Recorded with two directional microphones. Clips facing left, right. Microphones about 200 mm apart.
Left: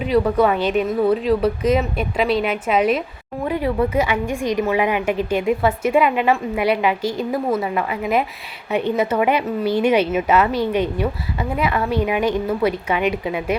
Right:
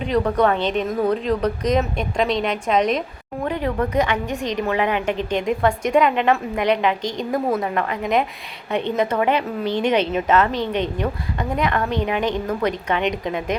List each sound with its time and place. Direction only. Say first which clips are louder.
0.0 s a woman's voice: left 2 dB; 5° left (ahead or behind)